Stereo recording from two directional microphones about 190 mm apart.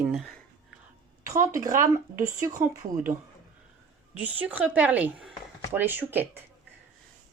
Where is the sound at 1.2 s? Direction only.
15° right (ahead or behind).